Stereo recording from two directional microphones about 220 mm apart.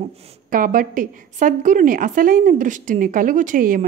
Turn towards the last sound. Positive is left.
turn(degrees=-40)  # may be behind; listen again after turning